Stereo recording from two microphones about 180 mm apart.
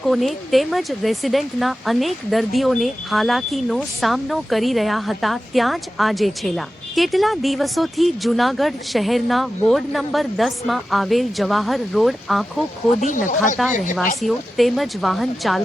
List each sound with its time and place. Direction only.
0.0 s speech: centre (ahead or behind)
13.0 s speech: 45° left (ahead or behind)
14.2 s speech: centre (ahead or behind)